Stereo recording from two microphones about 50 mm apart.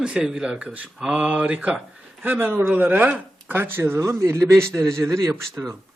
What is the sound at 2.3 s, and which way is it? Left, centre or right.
Speech, right.